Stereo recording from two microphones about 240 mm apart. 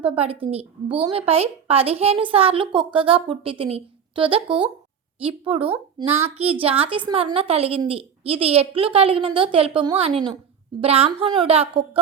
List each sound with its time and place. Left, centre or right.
0.0 s a woman's voice: right